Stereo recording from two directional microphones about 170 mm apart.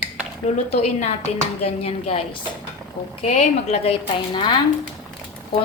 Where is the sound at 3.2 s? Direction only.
40° left (ahead or behind).